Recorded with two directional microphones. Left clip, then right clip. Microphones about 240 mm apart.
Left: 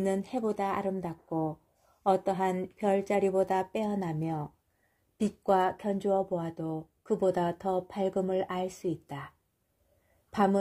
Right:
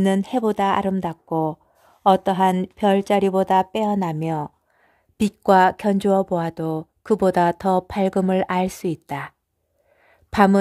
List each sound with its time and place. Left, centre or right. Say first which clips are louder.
0.0 s speech: right 10 dB; right
10.3 s speech: right 11 dB; right